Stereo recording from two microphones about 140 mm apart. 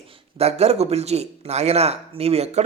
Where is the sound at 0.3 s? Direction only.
50° right (ahead or behind).